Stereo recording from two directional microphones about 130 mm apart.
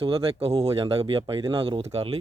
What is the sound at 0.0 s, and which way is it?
Speech, 45° right (ahead or behind).